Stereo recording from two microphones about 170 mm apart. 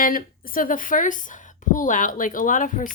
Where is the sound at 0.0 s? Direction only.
55° left (ahead or behind).